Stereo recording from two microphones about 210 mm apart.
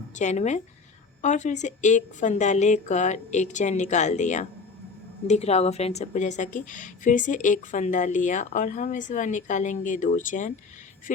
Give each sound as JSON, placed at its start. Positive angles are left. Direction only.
{"t": 0.2, "sound": "a woman's voice", "side_deg": 35}